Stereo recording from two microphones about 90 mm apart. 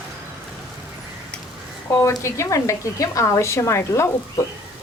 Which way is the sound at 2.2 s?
35° left (ahead or behind).